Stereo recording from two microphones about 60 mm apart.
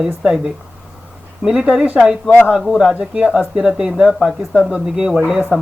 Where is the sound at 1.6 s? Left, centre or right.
Centre.